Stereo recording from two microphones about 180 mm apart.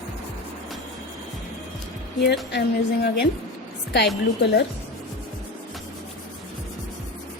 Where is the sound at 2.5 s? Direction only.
70° left (ahead or behind).